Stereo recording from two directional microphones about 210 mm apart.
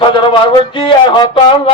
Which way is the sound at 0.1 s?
25° left (ahead or behind).